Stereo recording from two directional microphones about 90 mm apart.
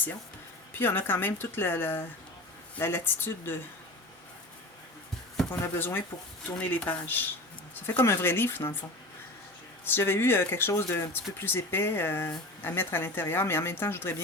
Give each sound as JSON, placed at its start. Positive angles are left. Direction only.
{"t": 0.7, "sound": "speech", "side_deg": 25}
{"t": 5.5, "sound": "speech", "side_deg": 25}
{"t": 9.8, "sound": "speech", "side_deg": 25}